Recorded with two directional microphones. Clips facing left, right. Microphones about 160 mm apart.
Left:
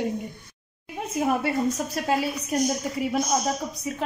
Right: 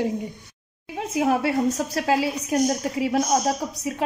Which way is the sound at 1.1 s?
90° right.